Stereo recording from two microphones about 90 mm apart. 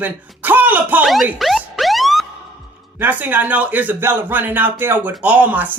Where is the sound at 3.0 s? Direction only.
20° right (ahead or behind).